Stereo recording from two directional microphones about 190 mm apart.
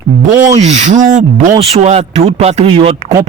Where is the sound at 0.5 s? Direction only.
35° right (ahead or behind).